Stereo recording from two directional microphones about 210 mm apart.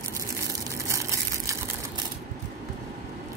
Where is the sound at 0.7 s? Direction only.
15° right (ahead or behind).